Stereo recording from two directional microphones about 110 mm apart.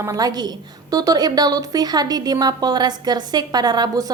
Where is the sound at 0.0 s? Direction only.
35° right (ahead or behind).